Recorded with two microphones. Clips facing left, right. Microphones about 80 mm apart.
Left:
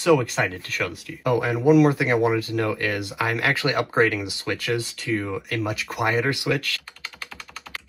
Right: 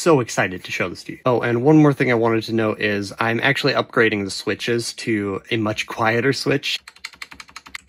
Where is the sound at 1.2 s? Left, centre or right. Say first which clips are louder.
Right 3 dB; right.